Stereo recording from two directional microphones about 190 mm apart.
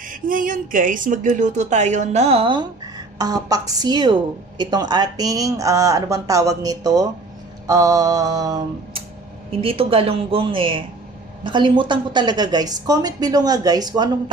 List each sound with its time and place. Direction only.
0.1 s a woman's voice: 45° right (ahead or behind); by 14.1 s 20° right (ahead or behind)